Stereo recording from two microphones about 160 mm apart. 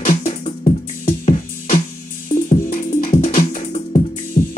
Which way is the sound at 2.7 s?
60° left (ahead or behind).